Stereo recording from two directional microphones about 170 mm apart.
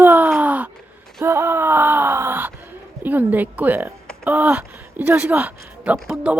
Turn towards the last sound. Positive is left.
turn(degrees=-5)  # may be behind; listen again after turning